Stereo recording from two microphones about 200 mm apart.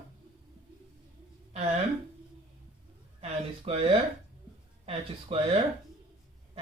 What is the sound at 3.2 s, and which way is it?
Speech, 30° right (ahead or behind).